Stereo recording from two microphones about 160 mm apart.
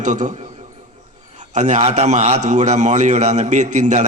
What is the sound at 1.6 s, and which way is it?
A man's voice, 45° right (ahead or behind).